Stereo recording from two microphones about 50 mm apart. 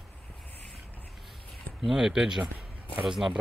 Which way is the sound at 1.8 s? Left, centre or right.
Centre.